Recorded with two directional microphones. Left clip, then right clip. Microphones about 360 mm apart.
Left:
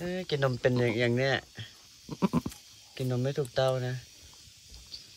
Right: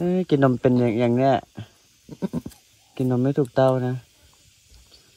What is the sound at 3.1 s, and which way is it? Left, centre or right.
Speech, right.